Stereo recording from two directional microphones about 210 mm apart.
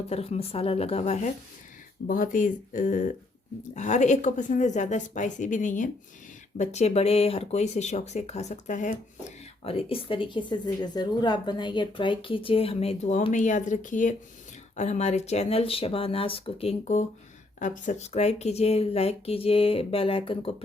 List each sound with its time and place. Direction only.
0.1 s a woman's voice: 30° left (ahead or behind)